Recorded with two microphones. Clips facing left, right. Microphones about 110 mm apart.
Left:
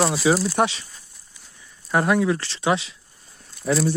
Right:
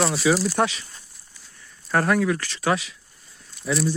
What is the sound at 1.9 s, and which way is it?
Speech, 15° left (ahead or behind).